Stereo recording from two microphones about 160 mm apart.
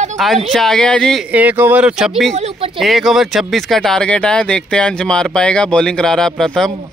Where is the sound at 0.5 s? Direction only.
5° left (ahead or behind).